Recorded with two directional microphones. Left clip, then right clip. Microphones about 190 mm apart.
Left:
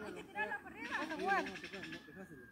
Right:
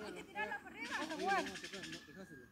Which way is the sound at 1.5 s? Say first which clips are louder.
Left 1 dB; 60° right (ahead or behind).